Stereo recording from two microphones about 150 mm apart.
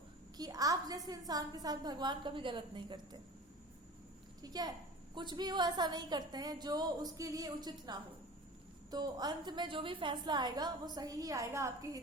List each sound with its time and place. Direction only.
0.3 s a woman's voice: 25° right (ahead or behind)
4.4 s a woman's voice: 25° right (ahead or behind)